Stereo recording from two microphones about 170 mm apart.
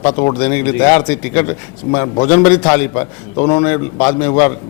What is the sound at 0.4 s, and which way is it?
A man's voice, 10° left (ahead or behind).